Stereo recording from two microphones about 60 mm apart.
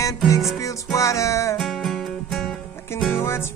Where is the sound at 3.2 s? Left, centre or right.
Left.